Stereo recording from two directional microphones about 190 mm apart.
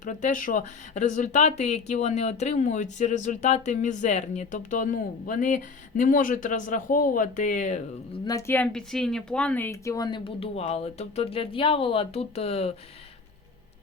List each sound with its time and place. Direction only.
0.0 s speech: 40° left (ahead or behind)
8.2 s speech: 20° left (ahead or behind)